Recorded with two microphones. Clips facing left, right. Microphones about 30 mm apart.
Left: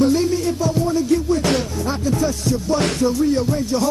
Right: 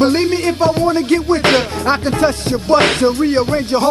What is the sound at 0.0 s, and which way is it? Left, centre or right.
Music, right.